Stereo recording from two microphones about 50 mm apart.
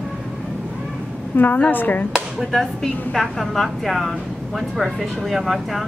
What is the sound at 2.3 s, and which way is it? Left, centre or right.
A woman's voice, centre.